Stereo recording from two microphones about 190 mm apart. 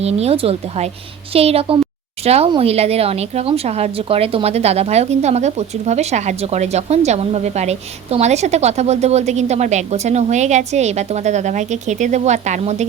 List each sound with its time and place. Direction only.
0.0 s a woman's voice: 35° right (ahead or behind)